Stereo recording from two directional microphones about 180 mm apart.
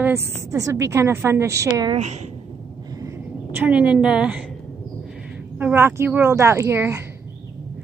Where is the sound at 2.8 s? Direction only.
20° right (ahead or behind).